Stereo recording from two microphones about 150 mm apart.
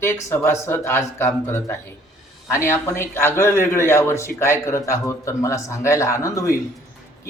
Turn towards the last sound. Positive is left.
turn(degrees=20)  # may be behind; listen again after turning